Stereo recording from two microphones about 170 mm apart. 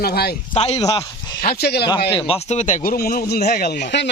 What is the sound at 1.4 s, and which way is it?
Speech, 70° left (ahead or behind).